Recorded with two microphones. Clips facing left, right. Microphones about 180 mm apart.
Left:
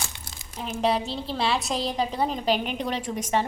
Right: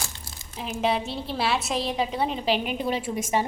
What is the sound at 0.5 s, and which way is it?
A woman's voice, centre (ahead or behind).